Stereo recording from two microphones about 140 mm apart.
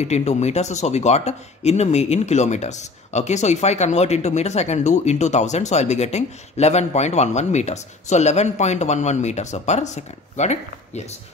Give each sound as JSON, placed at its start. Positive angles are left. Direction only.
{"t": 0.0, "sound": "speech", "side_deg": 50}